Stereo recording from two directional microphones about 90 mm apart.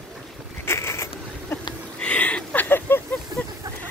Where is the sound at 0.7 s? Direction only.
30° left (ahead or behind).